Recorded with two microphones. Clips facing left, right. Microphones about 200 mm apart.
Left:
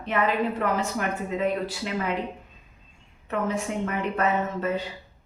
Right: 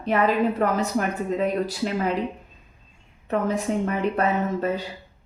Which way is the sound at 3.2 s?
35° right (ahead or behind).